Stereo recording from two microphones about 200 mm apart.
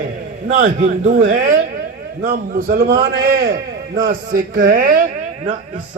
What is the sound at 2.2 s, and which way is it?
A man's voice, 45° right (ahead or behind).